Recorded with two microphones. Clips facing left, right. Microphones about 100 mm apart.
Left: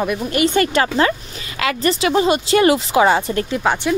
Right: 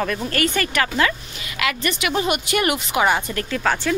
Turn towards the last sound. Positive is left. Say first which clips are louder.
# left 3 dB
turn(degrees=20)  # may be behind; listen again after turning